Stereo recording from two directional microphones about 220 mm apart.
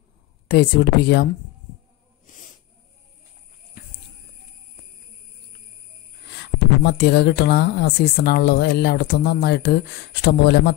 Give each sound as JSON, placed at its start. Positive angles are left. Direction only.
{"t": 0.5, "sound": "speech", "side_deg": 50}
{"t": 3.8, "sound": "a sound", "side_deg": 40}
{"t": 6.2, "sound": "speech", "side_deg": 50}